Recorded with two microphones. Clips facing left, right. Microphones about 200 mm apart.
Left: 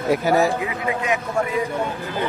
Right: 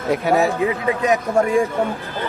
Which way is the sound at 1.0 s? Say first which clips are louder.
Right 6 dB; 40° right (ahead or behind).